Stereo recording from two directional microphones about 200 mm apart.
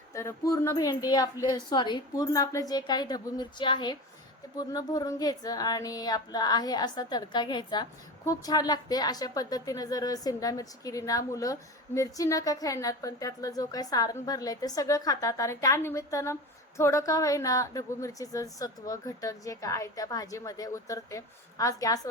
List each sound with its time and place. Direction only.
0.1 s a woman's voice: 15° left (ahead or behind)